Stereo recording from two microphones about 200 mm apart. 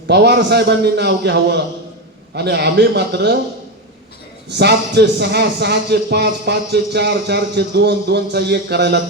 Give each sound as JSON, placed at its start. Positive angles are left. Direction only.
{"t": 0.1, "sound": "a man's voice", "side_deg": -55}
{"t": 4.4, "sound": "a man's voice", "side_deg": -55}